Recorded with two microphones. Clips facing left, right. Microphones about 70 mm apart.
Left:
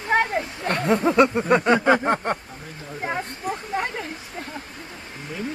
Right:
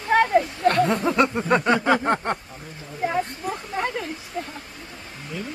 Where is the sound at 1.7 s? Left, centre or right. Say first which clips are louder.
Left 3 dB; centre.